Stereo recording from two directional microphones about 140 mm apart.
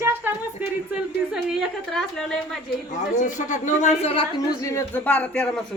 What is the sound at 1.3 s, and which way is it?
A woman's voice, centre (ahead or behind).